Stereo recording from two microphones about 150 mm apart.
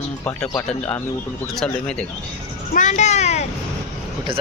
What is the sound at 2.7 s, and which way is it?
Speech, 55° left (ahead or behind).